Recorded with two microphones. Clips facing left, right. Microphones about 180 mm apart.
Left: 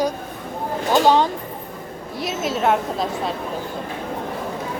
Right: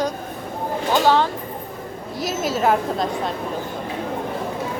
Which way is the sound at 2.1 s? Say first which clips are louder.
Right 1 dB; centre (ahead or behind).